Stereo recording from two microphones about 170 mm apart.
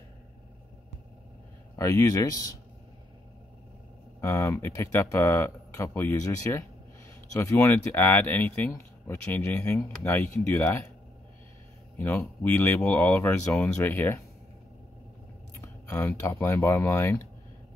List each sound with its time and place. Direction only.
1.8 s speech: 15° left (ahead or behind)
4.2 s speech: 15° left (ahead or behind)
12.0 s speech: 15° left (ahead or behind)
15.5 s speech: 15° left (ahead or behind)